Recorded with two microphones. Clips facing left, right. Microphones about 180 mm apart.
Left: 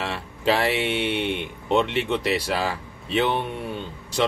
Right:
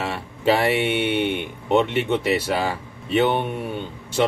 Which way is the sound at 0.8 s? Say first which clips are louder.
Right 3 dB; 55° right (ahead or behind).